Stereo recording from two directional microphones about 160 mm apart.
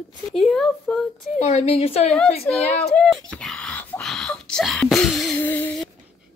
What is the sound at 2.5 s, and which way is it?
Speech, 10° left (ahead or behind).